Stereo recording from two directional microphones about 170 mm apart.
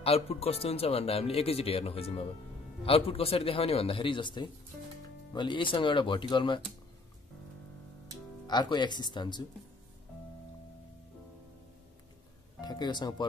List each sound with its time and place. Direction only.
0.0 s speech: 35° left (ahead or behind)
8.5 s speech: 25° left (ahead or behind)
12.5 s speech: 25° left (ahead or behind)